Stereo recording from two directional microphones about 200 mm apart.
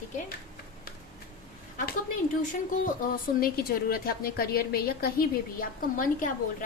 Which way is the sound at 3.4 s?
50° left (ahead or behind).